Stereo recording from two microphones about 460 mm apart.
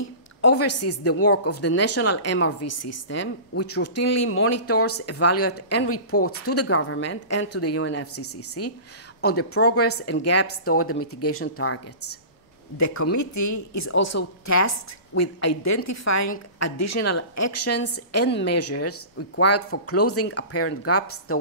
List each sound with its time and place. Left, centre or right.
0.0 s a woman's voice: left